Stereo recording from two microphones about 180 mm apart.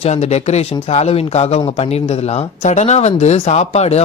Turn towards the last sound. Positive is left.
turn(degrees=35)  # may be behind; listen again after turning